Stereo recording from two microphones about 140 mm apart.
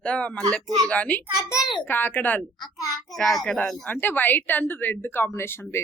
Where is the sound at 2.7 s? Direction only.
25° left (ahead or behind).